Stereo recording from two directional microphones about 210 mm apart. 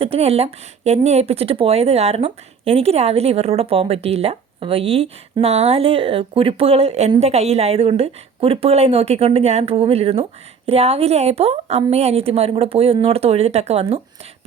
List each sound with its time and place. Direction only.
0.0 s speech: 30° right (ahead or behind)